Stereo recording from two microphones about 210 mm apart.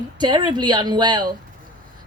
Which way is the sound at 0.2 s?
20° right (ahead or behind).